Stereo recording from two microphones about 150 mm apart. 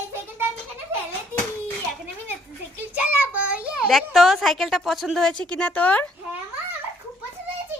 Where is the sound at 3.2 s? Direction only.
10° right (ahead or behind); by 6.0 s 10° left (ahead or behind).